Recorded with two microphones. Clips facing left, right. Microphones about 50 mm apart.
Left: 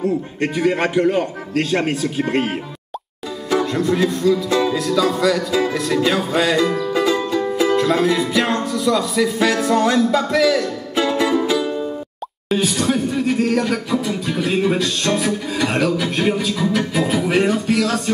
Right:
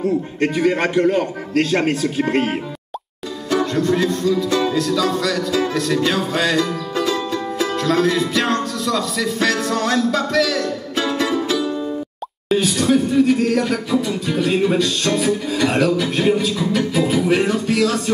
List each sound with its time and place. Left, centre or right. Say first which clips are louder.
0.4 s speech: even; centre
3.4 s music: even; left
12.4 s speech: right 2 dB; centre
16.7 s music: right 3 dB; centre